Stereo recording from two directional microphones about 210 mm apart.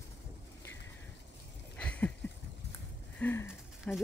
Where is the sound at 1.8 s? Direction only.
5° left (ahead or behind).